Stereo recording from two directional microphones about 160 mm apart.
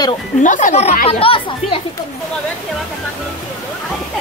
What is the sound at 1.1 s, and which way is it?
Speech, 35° left (ahead or behind).